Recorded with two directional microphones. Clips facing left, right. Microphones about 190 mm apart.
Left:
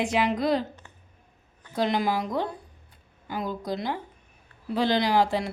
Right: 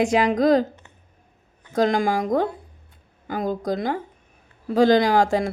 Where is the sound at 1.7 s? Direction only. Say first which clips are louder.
Right 5 dB; 45° right (ahead or behind).